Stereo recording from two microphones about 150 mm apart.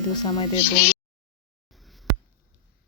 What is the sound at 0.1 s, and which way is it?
Speech, 25° left (ahead or behind).